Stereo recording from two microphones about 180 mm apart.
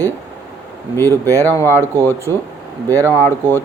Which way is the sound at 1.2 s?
15° right (ahead or behind).